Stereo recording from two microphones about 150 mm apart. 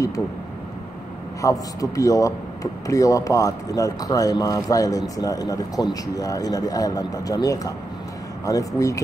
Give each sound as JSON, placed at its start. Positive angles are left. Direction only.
{"t": 1.4, "sound": "a man's voice", "side_deg": 20}